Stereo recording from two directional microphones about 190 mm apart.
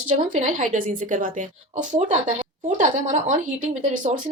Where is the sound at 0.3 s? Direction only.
40° right (ahead or behind).